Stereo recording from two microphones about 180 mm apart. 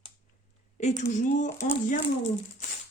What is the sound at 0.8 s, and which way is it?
Speech, 40° left (ahead or behind).